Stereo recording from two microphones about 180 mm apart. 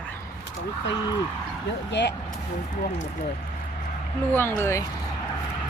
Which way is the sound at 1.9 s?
75° left (ahead or behind).